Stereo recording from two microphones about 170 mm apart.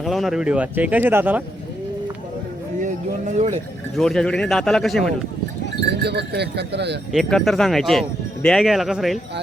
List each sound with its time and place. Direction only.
0.0 s speech: centre (ahead or behind)
2.8 s speech: 45° right (ahead or behind)
3.9 s a man's voice: 5° left (ahead or behind)
6.0 s speech: 75° right (ahead or behind)
7.1 s a man's voice: centre (ahead or behind)